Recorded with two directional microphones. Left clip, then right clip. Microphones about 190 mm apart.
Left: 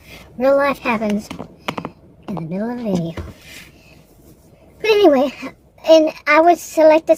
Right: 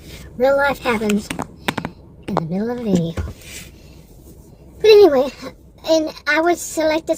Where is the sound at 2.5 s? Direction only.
25° left (ahead or behind).